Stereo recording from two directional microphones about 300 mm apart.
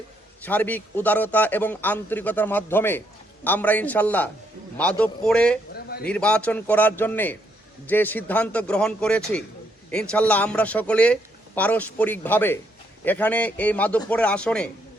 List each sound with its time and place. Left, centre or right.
0.4 s a man's voice: centre
5.7 s a sound: left
6.1 s a man's voice: centre